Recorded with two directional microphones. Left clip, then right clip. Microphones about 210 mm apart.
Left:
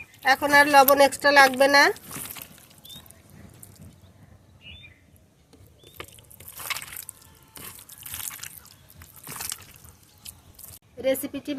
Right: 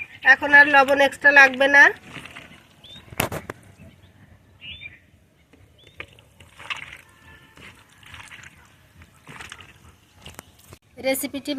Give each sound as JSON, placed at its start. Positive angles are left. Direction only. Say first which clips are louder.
{"t": 0.2, "sound": "speech", "louder": "right 5 dB", "side_deg": 25}
{"t": 10.9, "sound": "speech", "louder": "right 1 dB", "side_deg": -20}